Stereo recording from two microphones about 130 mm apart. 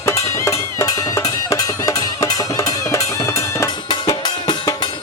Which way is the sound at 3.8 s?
35° left (ahead or behind).